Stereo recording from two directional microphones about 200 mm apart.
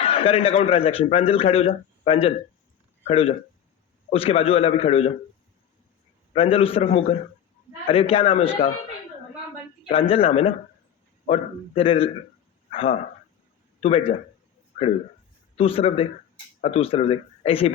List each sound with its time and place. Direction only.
0.0 s a man's voice: 30° left (ahead or behind)
6.3 s a man's voice: 30° left (ahead or behind)
9.9 s a man's voice: 30° left (ahead or behind)
15.5 s a man's voice: 30° left (ahead or behind)